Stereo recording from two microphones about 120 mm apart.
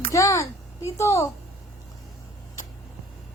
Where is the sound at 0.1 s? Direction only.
25° left (ahead or behind).